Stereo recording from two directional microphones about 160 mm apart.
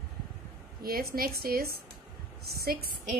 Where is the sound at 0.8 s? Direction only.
70° right (ahead or behind).